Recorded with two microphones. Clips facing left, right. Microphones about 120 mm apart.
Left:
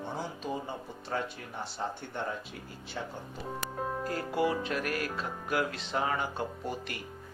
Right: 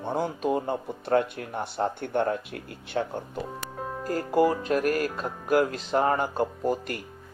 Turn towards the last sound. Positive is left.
turn(degrees=-45)  # may be behind; listen again after turning